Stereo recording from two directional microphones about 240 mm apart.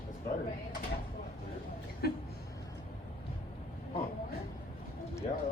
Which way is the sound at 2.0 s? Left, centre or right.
Left.